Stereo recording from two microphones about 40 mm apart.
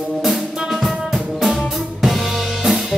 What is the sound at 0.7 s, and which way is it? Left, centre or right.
Music, centre.